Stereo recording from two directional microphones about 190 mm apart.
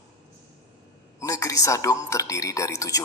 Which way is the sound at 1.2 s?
15° left (ahead or behind).